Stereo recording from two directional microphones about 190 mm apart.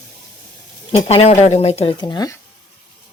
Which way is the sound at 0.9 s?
30° left (ahead or behind).